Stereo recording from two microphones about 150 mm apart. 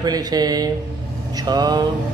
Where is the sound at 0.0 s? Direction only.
25° right (ahead or behind).